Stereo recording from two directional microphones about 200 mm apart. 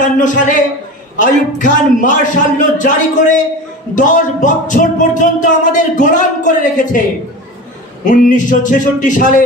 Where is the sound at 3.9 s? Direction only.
40° left (ahead or behind).